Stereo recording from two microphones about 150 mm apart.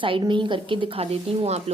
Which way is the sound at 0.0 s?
35° right (ahead or behind).